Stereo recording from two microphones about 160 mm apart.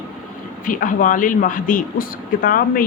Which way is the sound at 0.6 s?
55° left (ahead or behind).